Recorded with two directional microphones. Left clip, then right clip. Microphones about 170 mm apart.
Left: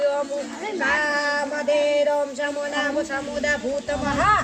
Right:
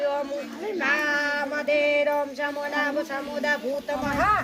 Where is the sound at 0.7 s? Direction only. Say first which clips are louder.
Left 2 dB; 35° left (ahead or behind).